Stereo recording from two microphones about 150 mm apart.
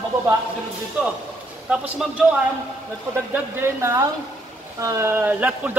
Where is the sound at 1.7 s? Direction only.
5° right (ahead or behind).